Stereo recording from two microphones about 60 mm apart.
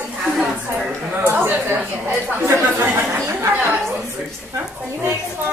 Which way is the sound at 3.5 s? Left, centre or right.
Right.